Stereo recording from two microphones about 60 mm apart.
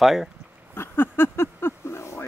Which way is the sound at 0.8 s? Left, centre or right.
Left.